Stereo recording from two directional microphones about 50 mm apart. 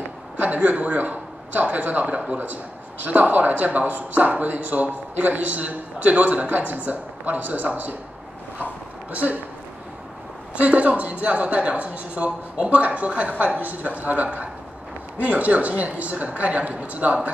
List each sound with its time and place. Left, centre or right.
0.4 s a man's voice: right
9.1 s a man's voice: right
10.5 s a man's voice: right